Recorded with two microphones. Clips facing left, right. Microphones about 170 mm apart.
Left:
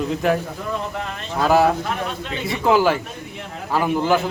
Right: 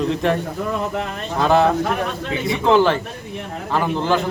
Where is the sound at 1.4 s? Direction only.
5° left (ahead or behind).